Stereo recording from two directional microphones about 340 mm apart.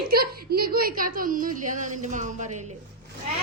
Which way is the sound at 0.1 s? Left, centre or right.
Right.